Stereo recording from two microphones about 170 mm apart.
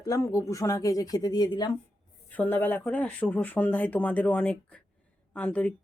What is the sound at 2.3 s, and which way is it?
Speech, 10° left (ahead or behind).